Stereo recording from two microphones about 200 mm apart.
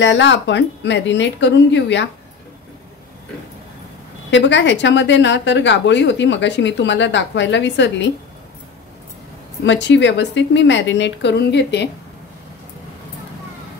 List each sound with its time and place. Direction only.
0.0 s a woman's voice: 65° left (ahead or behind)
4.3 s a woman's voice: 65° left (ahead or behind)
9.7 s a woman's voice: 65° left (ahead or behind)